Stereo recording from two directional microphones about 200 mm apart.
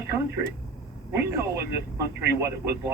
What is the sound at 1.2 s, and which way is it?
Speech, 15° right (ahead or behind).